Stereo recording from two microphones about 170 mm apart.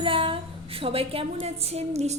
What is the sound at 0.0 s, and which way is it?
A woman's voice, 30° right (ahead or behind).